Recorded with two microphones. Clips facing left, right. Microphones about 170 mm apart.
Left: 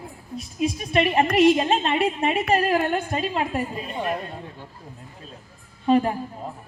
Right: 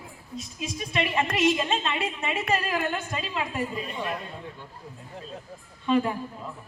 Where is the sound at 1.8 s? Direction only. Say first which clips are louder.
Left 7 dB; 35° left (ahead or behind).